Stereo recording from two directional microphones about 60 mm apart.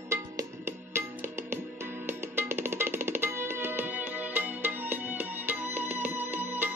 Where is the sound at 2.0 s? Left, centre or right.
Right.